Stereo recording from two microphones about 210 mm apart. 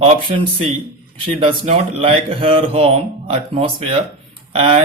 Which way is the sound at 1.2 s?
25° right (ahead or behind).